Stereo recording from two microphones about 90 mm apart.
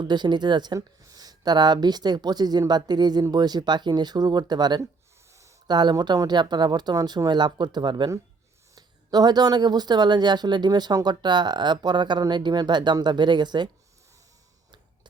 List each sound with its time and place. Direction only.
0.0 s speech: 55° right (ahead or behind)
5.3 s a sound: 35° right (ahead or behind)
5.6 s speech: 50° right (ahead or behind)